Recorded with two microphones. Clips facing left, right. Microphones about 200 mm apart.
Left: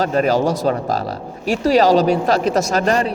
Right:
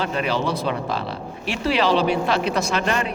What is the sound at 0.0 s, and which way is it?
A man's voice, 40° left (ahead or behind).